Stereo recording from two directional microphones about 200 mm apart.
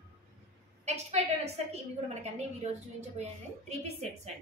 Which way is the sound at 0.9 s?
35° right (ahead or behind).